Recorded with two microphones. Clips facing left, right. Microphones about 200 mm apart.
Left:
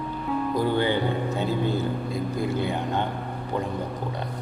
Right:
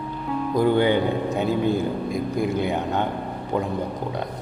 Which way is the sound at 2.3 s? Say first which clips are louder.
Right 3 dB; 20° right (ahead or behind).